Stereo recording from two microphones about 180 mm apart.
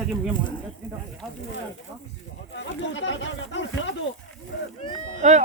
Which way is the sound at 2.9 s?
90° left.